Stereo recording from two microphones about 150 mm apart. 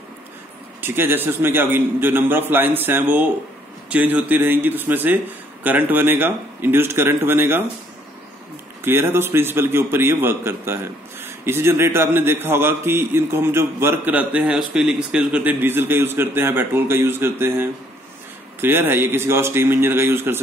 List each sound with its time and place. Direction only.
0.7 s a man's voice: 15° right (ahead or behind)
8.8 s a man's voice: 15° right (ahead or behind)